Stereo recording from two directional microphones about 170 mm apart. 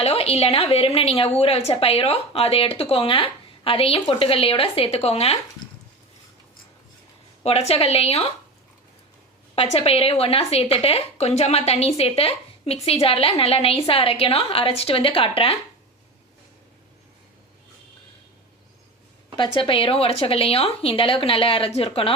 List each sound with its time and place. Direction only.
0.0 s a woman's voice: 35° left (ahead or behind)
7.4 s a woman's voice: 35° left (ahead or behind)
9.6 s a woman's voice: 35° left (ahead or behind)
19.4 s a woman's voice: 30° left (ahead or behind)